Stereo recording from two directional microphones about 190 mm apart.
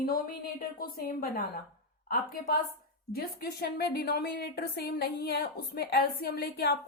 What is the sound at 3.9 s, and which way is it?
A woman's voice, 55° left (ahead or behind).